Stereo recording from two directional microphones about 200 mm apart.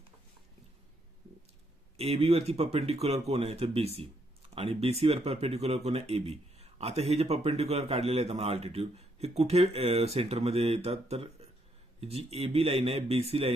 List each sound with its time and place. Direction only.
2.0 s speech: 30° right (ahead or behind)